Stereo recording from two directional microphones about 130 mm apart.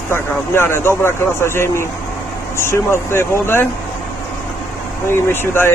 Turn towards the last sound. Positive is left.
turn(degrees=15)  # may be behind; listen again after turning